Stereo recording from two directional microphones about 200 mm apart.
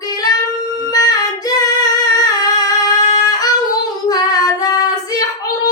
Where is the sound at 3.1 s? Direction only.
20° left (ahead or behind).